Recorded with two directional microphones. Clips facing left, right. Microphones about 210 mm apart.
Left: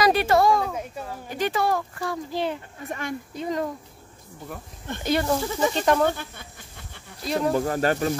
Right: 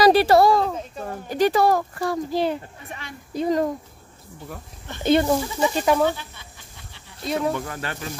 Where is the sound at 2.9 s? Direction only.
50° left (ahead or behind).